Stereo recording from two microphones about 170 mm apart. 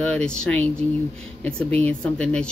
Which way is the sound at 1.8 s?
5° left (ahead or behind).